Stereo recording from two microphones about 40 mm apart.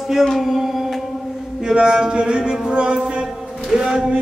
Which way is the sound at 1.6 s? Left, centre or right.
Centre.